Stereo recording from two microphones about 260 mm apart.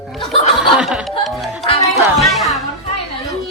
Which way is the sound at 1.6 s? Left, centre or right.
Left.